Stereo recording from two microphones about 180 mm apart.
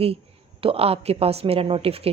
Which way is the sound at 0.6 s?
30° right (ahead or behind).